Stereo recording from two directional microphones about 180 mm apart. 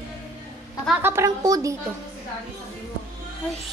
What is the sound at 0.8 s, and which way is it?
Speech, 10° right (ahead or behind).